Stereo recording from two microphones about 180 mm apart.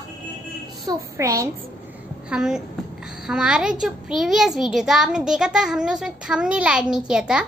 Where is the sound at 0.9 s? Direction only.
15° right (ahead or behind).